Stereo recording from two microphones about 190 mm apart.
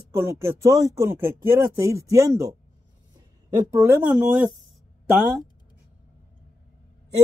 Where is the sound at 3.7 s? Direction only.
10° right (ahead or behind).